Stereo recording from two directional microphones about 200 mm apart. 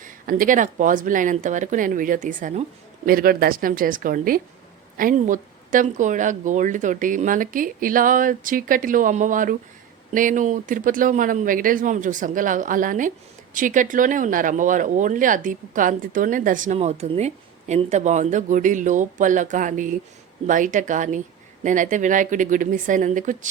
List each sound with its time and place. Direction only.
0.0 s a woman's voice: 45° right (ahead or behind)